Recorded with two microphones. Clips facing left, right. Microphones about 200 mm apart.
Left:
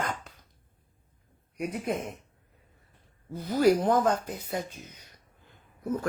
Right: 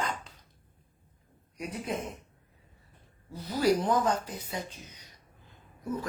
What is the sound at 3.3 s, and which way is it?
Speech, 50° left (ahead or behind).